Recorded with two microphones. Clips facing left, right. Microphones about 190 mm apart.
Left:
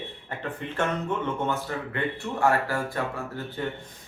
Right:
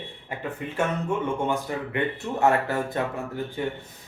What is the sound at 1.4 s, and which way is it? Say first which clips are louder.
Speech: right 2 dB; 15° right (ahead or behind).